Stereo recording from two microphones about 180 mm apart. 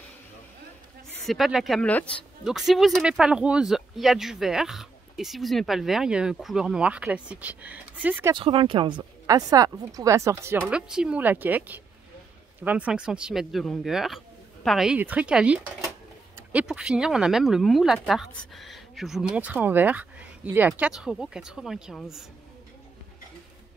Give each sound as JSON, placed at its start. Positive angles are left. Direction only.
{"t": 1.2, "sound": "speech", "side_deg": 0}
{"t": 8.3, "sound": "speech", "side_deg": -30}
{"t": 10.7, "sound": "a woman's voice", "side_deg": -5}